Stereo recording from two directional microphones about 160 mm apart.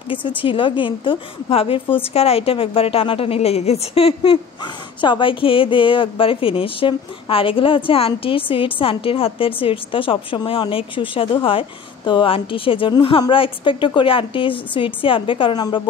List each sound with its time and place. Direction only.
0.1 s a woman's voice: 30° left (ahead or behind)